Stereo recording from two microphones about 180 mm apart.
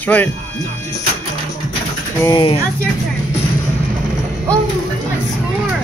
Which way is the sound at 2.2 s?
30° left (ahead or behind).